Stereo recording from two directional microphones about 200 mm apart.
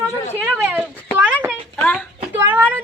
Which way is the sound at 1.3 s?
5° right (ahead or behind).